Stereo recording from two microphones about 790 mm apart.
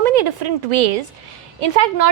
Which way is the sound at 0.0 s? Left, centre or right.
Right.